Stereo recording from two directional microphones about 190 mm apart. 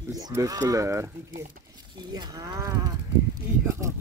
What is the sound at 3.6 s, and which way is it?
Speech, 15° right (ahead or behind).